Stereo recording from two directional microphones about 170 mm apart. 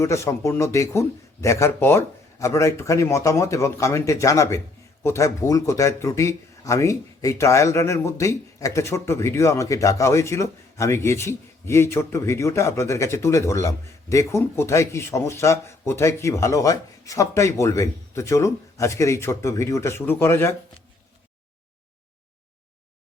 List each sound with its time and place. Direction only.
0.0 s speech: 15° left (ahead or behind)